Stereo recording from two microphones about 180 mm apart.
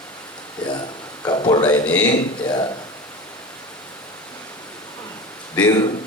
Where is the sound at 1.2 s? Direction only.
25° left (ahead or behind).